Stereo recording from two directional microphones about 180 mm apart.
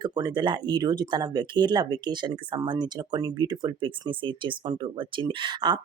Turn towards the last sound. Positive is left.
turn(degrees=-25)  # may be behind; listen again after turning